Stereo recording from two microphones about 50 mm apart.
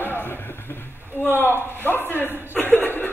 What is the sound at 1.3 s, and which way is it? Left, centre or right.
Chuckle, left.